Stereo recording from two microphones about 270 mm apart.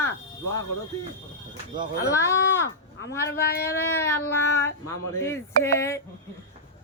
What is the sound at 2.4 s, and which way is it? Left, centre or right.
Speech, left.